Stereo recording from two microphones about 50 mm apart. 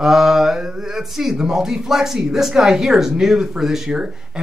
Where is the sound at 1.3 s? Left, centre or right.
Centre.